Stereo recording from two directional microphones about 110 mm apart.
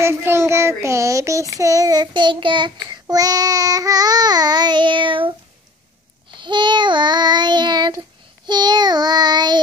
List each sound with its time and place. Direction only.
0.0 s child singing: 25° right (ahead or behind); by 5.3 s 50° right (ahead or behind)
6.3 s child singing: 45° right (ahead or behind)